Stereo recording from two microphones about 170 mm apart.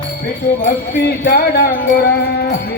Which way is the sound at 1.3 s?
60° left (ahead or behind).